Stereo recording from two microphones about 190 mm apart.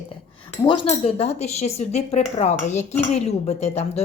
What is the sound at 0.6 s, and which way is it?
Cutlery, 25° left (ahead or behind).